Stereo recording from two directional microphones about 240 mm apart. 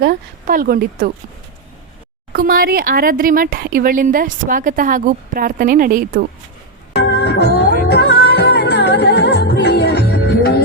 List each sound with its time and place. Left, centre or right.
0.0 s speech: right
2.3 s speech: right
6.9 s music: left